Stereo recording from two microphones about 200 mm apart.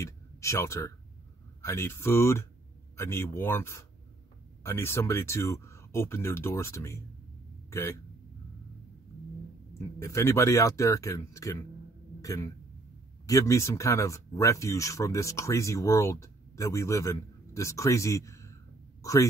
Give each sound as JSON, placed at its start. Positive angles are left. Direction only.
{"t": 0.0, "sound": "speech", "side_deg": 15}
{"t": 9.8, "sound": "speech", "side_deg": 15}